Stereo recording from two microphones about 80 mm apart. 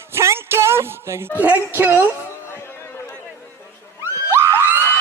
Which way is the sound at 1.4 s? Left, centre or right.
Right.